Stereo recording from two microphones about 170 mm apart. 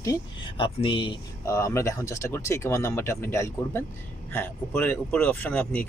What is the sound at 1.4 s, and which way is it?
Speech, 15° left (ahead or behind).